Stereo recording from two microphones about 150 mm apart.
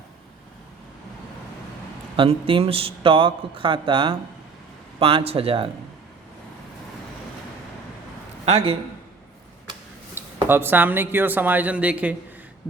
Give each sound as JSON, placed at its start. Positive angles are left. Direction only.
{"t": 2.1, "sound": "a man's voice", "side_deg": -40}
{"t": 8.4, "sound": "a man's voice", "side_deg": -45}
{"t": 10.2, "sound": "speech", "side_deg": -15}